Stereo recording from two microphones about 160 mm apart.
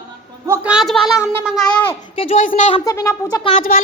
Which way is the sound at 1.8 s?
35° left (ahead or behind).